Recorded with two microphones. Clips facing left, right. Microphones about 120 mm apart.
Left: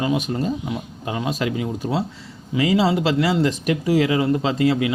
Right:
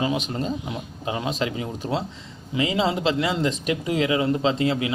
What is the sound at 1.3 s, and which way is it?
Speech, 30° right (ahead or behind).